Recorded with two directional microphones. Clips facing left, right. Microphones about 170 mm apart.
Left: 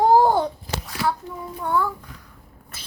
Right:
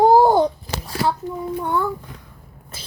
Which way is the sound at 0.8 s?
30° right (ahead or behind).